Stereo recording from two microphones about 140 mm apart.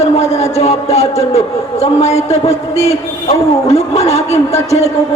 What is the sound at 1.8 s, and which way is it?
Speech, 50° left (ahead or behind).